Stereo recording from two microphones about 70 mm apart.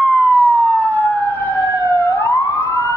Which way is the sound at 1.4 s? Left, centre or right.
Left.